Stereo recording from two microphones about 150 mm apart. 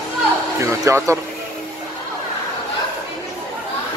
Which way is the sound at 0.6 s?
20° right (ahead or behind).